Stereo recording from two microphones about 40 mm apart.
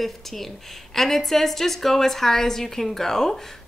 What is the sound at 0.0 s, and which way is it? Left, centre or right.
A woman's voice, centre.